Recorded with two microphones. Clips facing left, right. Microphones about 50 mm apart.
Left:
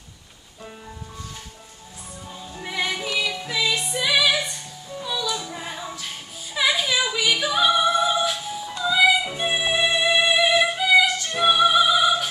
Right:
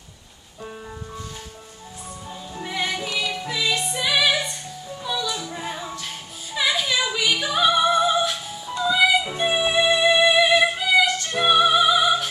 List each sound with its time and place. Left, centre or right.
2.6 s music: centre